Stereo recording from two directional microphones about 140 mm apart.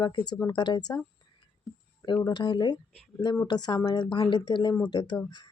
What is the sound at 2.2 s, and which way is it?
A woman's voice, 30° left (ahead or behind).